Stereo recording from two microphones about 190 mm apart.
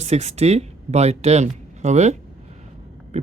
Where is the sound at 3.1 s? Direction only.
40° right (ahead or behind).